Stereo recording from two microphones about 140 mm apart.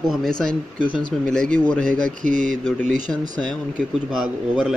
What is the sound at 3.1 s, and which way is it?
Speech, 15° left (ahead or behind).